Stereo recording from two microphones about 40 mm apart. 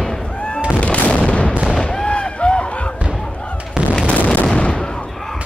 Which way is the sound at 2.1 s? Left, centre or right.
Left.